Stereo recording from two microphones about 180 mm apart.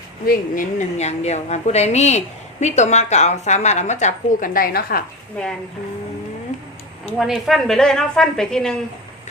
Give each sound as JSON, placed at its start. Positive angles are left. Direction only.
{"t": 0.3, "sound": "a woman's voice", "side_deg": 45}
{"t": 7.2, "sound": "a woman's voice", "side_deg": 0}